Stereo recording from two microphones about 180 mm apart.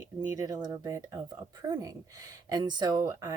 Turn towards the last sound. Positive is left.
turn(degrees=-15)  # may be behind; listen again after turning